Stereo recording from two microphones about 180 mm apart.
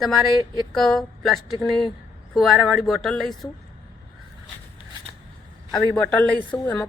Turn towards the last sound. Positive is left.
turn(degrees=5)  # may be behind; listen again after turning